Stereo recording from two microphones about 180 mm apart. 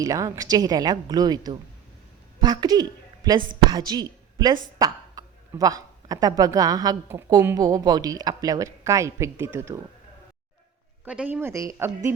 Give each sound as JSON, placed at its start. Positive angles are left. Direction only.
{"t": 0.0, "sound": "a woman's voice", "side_deg": -20}
{"t": 11.0, "sound": "a woman's voice", "side_deg": -5}